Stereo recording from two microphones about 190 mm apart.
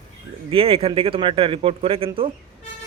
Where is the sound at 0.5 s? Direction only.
30° right (ahead or behind).